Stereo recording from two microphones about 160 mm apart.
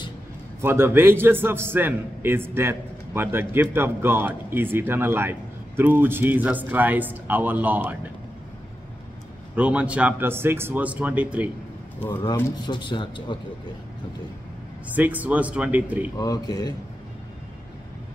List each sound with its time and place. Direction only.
0.6 s a man's voice: 15° right (ahead or behind)
9.6 s a man's voice: 10° right (ahead or behind)
12.6 s a man's voice: 30° left (ahead or behind)
15.0 s a man's voice: 10° right (ahead or behind)
16.2 s a man's voice: 25° left (ahead or behind)